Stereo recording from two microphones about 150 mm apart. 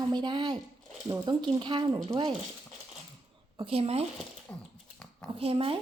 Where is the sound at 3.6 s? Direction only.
40° right (ahead or behind).